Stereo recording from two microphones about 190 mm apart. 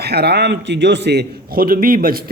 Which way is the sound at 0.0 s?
60° right (ahead or behind).